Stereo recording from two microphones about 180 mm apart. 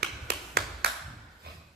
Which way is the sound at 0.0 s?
60° right (ahead or behind).